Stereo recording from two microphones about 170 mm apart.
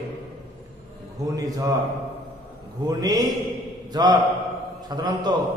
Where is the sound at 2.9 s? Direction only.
20° right (ahead or behind).